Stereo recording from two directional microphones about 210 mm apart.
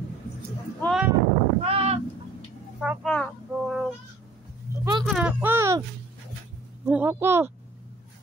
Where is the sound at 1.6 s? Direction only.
30° right (ahead or behind).